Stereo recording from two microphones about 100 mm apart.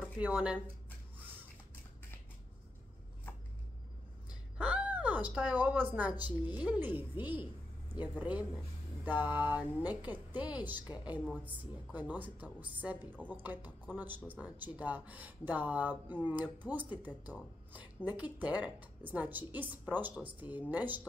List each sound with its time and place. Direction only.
0.2 s speech: 15° right (ahead or behind)
4.3 s a sound: 10° right (ahead or behind)
6.4 s a woman's voice: 15° right (ahead or behind)